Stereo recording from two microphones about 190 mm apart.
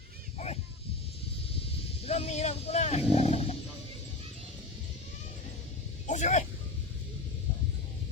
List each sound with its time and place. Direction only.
0.3 s a sound: 35° left (ahead or behind)
1.5 s vehicle: 30° left (ahead or behind)
6.1 s vehicle: 40° left (ahead or behind)